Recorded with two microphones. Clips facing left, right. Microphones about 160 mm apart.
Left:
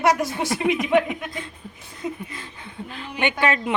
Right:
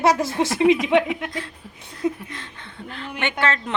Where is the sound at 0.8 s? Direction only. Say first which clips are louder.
Right 1 dB; centre (ahead or behind).